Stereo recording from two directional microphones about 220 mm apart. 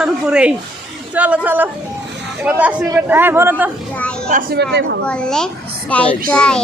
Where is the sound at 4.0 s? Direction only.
5° left (ahead or behind).